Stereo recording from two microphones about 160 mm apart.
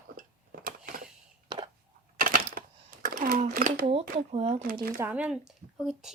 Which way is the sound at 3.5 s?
65° right (ahead or behind).